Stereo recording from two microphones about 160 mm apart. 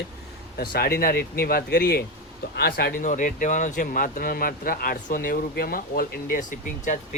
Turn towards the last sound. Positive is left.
turn(degrees=50)  # may be behind; listen again after turning